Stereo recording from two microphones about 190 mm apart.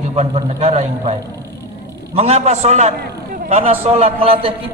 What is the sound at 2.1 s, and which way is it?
A man's voice, 35° right (ahead or behind).